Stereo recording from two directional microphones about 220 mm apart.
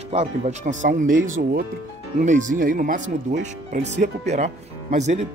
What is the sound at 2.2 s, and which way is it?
Speech, 35° right (ahead or behind).